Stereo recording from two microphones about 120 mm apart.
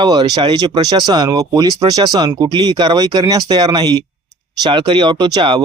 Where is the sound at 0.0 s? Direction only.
35° right (ahead or behind).